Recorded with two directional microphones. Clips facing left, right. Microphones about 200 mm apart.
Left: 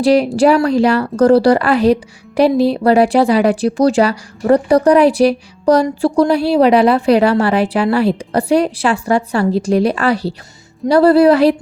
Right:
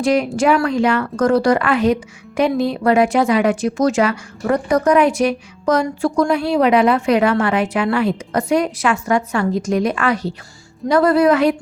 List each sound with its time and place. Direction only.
0.0 s speech: 35° left (ahead or behind)